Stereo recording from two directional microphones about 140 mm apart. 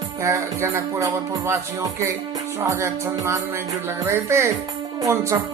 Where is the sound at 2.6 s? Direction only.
20° right (ahead or behind).